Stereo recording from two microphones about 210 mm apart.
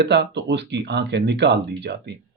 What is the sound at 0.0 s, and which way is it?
Speech, 55° right (ahead or behind).